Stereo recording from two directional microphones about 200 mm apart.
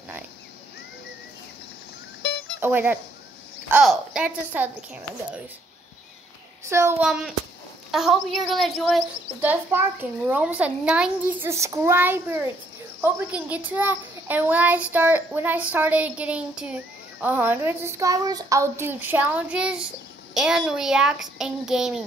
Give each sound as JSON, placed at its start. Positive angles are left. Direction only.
{"t": 2.2, "sound": "a sound", "side_deg": 55}
{"t": 2.6, "sound": "a child's voice", "side_deg": -10}
{"t": 6.6, "sound": "a child's voice", "side_deg": -15}
{"t": 7.1, "sound": "a child's voice", "side_deg": 0}